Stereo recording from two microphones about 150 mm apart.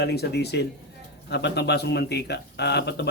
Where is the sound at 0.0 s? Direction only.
90° left.